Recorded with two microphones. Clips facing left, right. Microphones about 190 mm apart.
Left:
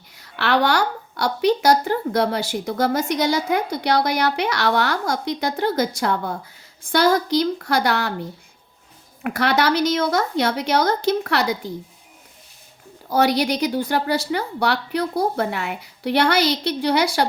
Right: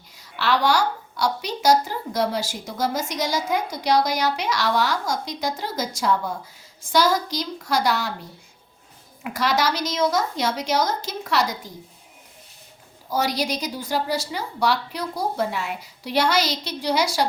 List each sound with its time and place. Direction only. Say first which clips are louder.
0.2 s a woman's voice: left 2 dB; 60° left (ahead or behind)
9.2 s a woman's voice: left 3 dB; 60° left (ahead or behind)
13.1 s a woman's voice: left 6 dB; 65° left (ahead or behind)